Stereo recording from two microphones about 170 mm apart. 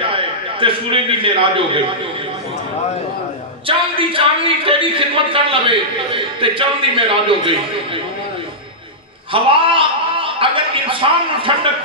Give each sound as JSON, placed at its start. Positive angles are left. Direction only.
{"t": 0.0, "sound": "a man's voice", "side_deg": -30}
{"t": 3.6, "sound": "speech", "side_deg": -30}
{"t": 9.3, "sound": "a man's voice", "side_deg": -30}